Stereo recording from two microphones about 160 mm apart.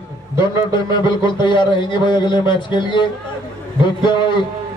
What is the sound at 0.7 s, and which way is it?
A man's voice, 30° left (ahead or behind).